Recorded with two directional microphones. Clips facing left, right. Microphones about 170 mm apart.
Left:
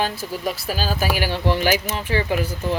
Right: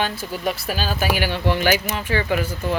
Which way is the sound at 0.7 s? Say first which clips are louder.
Left 1 dB; 40° left (ahead or behind).